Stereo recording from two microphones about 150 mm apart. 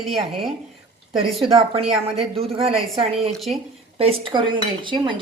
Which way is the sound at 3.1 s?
Centre (ahead or behind).